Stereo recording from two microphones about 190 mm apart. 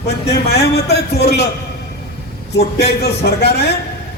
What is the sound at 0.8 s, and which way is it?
Speech, 60° left (ahead or behind).